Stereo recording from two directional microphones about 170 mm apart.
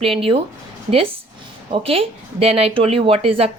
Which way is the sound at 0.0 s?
35° right (ahead or behind).